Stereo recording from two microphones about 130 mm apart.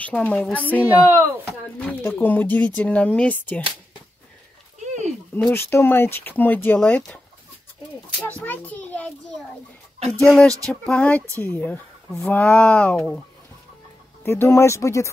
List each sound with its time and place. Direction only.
0.0 s speech: 10° left (ahead or behind)
0.8 s speech: 15° right (ahead or behind)
1.4 s speech: 10° left (ahead or behind)
4.8 s a sound: 60° right (ahead or behind)
5.5 s speech: 20° left (ahead or behind)
8.4 s speech: 10° left (ahead or behind)
10.1 s speech: 5° left (ahead or behind)
14.2 s speech: 20° left (ahead or behind)